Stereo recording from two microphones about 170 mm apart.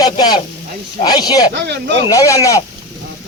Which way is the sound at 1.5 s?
90° right.